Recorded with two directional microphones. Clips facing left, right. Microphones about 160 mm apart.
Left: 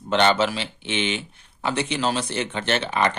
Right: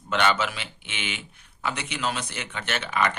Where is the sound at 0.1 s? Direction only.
30° left (ahead or behind).